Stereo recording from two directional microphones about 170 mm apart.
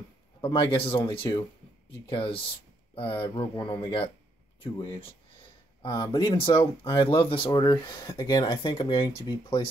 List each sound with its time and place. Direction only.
0.4 s speech: 30° left (ahead or behind)
5.8 s a sound: 30° left (ahead or behind)
6.0 s speech: 25° left (ahead or behind)